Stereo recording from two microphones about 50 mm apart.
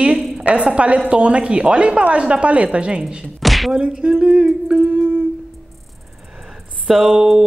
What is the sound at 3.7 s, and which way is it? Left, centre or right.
A woman's voice, right.